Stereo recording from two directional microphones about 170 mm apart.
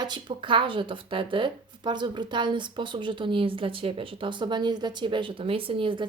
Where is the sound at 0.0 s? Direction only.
25° right (ahead or behind).